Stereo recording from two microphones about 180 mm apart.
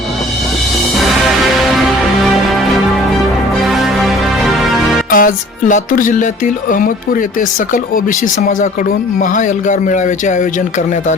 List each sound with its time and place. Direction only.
0.9 s music: centre (ahead or behind)
3.6 s music: centre (ahead or behind)
5.1 s speech: 50° left (ahead or behind)